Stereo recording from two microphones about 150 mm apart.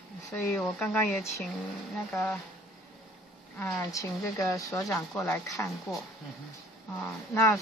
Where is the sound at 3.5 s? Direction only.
20° left (ahead or behind).